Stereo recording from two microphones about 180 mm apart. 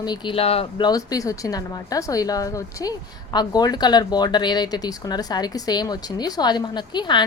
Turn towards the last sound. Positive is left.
turn(degrees=25)  # may be behind; listen again after turning